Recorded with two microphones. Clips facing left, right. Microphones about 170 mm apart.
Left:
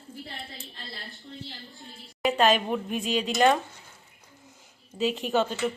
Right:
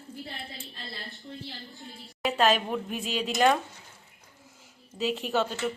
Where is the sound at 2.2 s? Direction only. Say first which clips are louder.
Left 2 dB; centre (ahead or behind).